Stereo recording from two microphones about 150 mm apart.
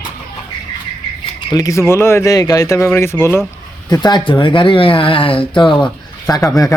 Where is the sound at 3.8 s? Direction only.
30° left (ahead or behind).